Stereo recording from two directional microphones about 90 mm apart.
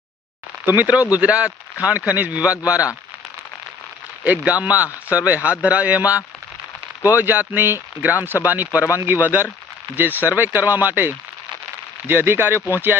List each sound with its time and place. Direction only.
0.8 s a man's voice: 15° right (ahead or behind)
4.2 s a man's voice: 15° right (ahead or behind)